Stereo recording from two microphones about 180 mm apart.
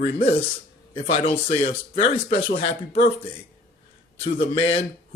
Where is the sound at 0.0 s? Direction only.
30° left (ahead or behind).